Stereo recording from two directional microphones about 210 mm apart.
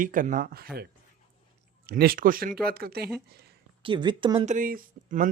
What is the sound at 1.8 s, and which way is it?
Speech, 45° right (ahead or behind).